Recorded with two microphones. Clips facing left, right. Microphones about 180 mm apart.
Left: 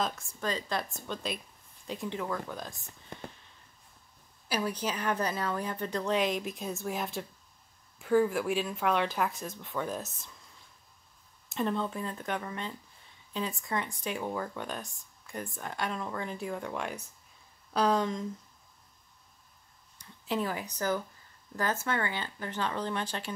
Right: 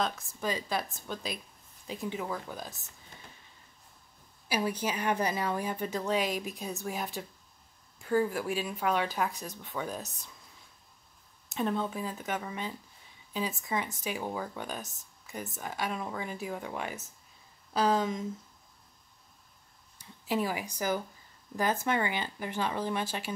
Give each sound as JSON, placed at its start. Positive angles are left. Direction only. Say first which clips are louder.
{"t": 0.0, "sound": "speech", "louder": "right 1 dB", "side_deg": 0}
{"t": 3.1, "sound": "a sound", "louder": "left 11 dB", "side_deg": 55}
{"t": 4.5, "sound": "a woman's voice", "louder": "right 1 dB", "side_deg": -10}
{"t": 11.4, "sound": "speech", "louder": "even", "side_deg": 0}
{"t": 20.0, "sound": "a woman's voice", "louder": "right 1 dB", "side_deg": -10}